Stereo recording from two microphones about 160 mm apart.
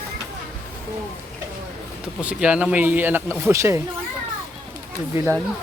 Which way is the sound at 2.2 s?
10° right (ahead or behind).